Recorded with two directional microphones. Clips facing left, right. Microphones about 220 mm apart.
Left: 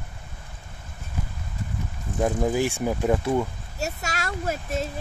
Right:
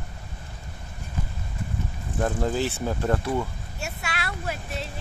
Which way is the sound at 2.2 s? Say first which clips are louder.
Left 2 dB; 10° left (ahead or behind).